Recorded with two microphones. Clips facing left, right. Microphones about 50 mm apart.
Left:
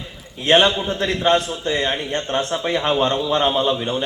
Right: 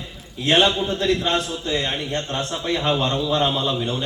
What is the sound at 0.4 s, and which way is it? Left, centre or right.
A man's voice, left.